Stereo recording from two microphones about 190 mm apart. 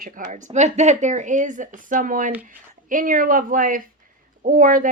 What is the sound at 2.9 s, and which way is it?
Speech, 45° right (ahead or behind).